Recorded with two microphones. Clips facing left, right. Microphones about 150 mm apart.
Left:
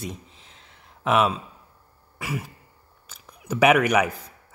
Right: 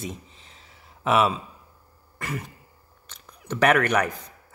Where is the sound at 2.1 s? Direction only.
5° left (ahead or behind).